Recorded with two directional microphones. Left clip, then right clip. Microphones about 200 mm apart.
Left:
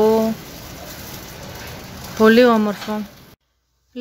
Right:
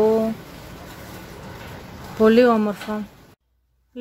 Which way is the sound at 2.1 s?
5° left (ahead or behind).